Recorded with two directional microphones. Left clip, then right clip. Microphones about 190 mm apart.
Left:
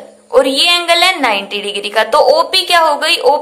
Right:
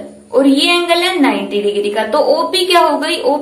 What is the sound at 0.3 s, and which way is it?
A woman's voice, 40° left (ahead or behind).